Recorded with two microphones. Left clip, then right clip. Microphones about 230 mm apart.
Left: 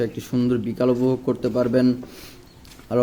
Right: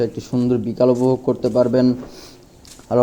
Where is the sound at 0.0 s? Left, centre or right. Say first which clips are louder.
Right 3 dB; centre.